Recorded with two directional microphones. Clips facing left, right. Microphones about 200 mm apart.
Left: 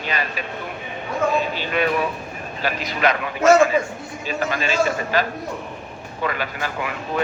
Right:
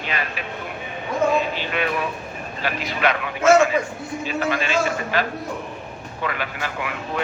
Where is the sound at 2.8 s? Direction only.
40° left (ahead or behind).